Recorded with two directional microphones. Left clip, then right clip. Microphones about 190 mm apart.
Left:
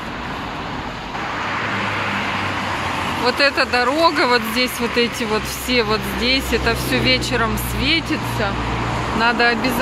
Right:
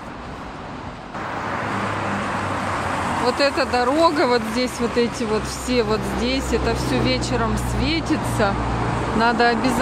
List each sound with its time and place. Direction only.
3.3 s speech: 10° right (ahead or behind)
9.2 s speech: 20° right (ahead or behind)